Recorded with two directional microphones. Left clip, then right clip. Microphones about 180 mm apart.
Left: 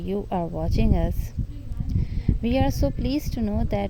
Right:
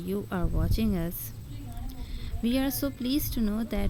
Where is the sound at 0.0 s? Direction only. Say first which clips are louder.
Left 6 dB; 20° left (ahead or behind).